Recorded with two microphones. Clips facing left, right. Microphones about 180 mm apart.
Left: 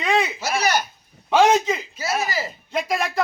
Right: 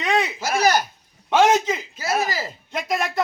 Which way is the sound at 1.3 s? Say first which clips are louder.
Left 1 dB; centre (ahead or behind).